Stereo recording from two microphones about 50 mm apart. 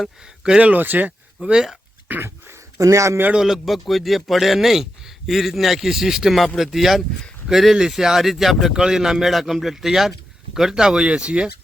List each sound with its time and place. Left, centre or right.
0.6 s speech: right
1.4 s speech: centre
2.7 s speech: right
3.3 s speech: centre